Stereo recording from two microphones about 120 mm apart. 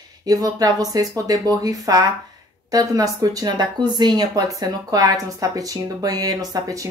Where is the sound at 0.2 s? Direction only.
30° right (ahead or behind).